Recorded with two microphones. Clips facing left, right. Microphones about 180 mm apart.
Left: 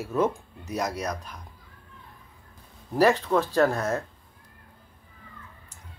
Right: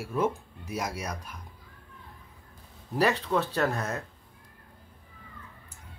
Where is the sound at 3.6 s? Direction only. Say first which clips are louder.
Left 6 dB; 35° left (ahead or behind).